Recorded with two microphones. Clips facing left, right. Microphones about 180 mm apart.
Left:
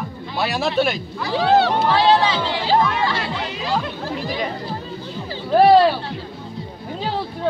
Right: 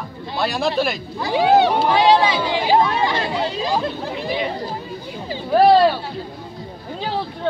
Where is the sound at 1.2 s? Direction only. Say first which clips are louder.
Right 2 dB; 15° right (ahead or behind).